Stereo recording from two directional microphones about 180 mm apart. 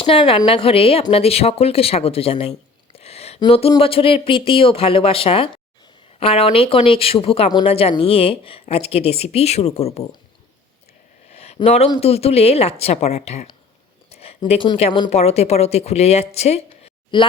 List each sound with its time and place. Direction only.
0.0 s speech: 30° left (ahead or behind)
11.3 s a sound: 35° left (ahead or behind)
11.9 s a woman's voice: 35° left (ahead or behind)